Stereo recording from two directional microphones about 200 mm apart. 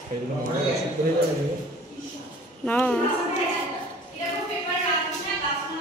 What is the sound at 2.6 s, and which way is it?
Speech, 10° left (ahead or behind).